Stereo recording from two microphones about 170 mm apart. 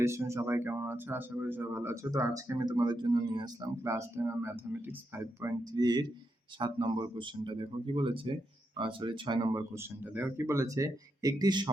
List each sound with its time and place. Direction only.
0.0 s speech: 15° right (ahead or behind)
5.7 s speech: 25° right (ahead or behind)
10.0 s speech: 10° right (ahead or behind)